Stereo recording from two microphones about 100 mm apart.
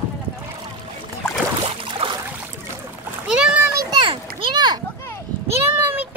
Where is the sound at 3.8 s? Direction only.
45° right (ahead or behind).